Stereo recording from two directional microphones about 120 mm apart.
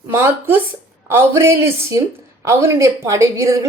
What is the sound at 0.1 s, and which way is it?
A woman's voice, 20° right (ahead or behind).